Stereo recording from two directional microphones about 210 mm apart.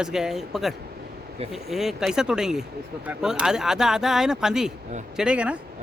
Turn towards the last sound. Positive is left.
turn(degrees=-5)  # may be behind; listen again after turning